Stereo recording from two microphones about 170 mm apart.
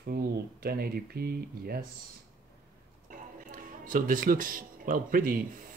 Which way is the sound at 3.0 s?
55° right (ahead or behind).